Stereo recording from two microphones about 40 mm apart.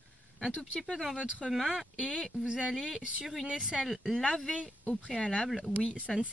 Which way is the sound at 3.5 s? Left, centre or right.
Centre.